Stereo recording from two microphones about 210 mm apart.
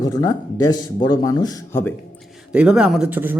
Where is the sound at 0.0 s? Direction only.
15° left (ahead or behind).